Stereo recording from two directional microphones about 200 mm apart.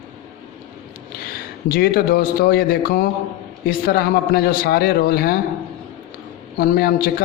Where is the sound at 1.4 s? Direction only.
50° left (ahead or behind).